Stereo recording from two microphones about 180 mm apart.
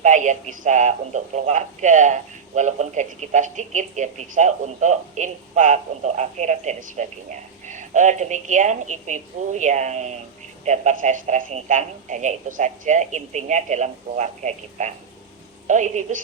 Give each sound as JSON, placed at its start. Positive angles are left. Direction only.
{"t": 0.0, "sound": "a man's voice", "side_deg": -45}